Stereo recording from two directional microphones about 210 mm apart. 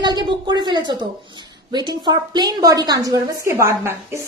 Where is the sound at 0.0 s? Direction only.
20° right (ahead or behind).